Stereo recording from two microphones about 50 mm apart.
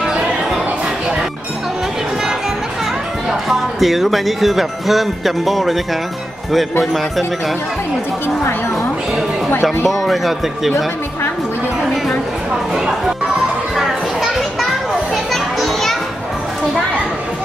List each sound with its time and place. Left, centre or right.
3.3 s speech: centre
6.8 s speech: centre
9.8 s speech: centre
12.7 s speech: centre
13.7 s children playing: centre